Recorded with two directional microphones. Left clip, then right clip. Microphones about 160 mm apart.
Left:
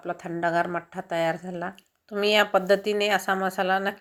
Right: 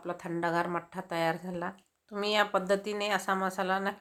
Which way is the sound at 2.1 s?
25° left (ahead or behind).